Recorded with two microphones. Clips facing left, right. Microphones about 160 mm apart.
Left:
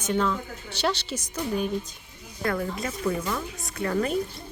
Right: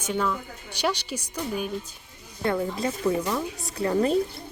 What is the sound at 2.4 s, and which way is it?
A woman's voice, 25° right (ahead or behind).